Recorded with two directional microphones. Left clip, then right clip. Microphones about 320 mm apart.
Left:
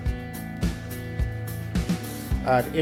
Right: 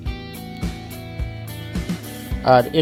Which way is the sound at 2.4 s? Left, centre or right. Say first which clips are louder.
Right 8 dB; centre.